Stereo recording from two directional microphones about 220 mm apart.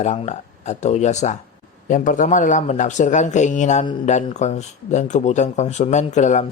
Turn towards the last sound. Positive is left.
turn(degrees=35)  # may be behind; listen again after turning